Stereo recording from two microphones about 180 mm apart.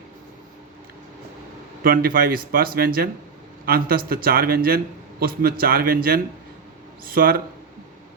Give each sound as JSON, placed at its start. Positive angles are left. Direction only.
{"t": 1.8, "sound": "speech", "side_deg": -55}